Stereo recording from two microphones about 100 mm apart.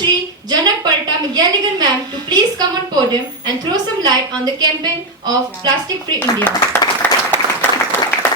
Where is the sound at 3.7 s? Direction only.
40° right (ahead or behind).